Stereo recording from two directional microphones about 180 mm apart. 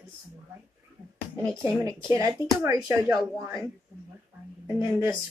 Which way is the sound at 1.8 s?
20° right (ahead or behind).